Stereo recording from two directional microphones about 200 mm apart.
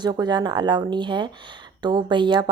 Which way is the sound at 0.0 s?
20° right (ahead or behind).